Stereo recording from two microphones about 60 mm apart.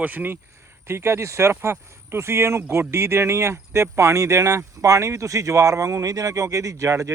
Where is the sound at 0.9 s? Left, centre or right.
Right.